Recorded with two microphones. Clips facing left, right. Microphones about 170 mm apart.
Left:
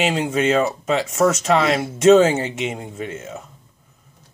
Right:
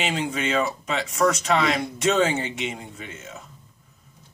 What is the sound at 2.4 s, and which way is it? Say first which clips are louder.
Speech: left 5 dB; 45° left (ahead or behind).